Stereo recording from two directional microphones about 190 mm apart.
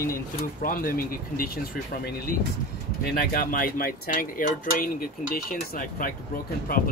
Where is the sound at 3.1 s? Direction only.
50° left (ahead or behind).